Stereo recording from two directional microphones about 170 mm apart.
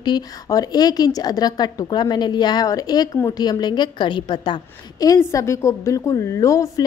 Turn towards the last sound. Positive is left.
turn(degrees=20)  # may be behind; listen again after turning